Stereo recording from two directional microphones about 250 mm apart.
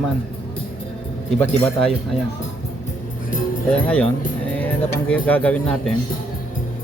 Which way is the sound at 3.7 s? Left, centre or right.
Centre.